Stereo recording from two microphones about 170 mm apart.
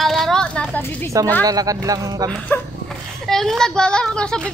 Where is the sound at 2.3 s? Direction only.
5° left (ahead or behind).